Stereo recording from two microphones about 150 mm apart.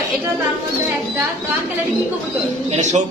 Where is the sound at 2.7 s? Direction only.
50° right (ahead or behind).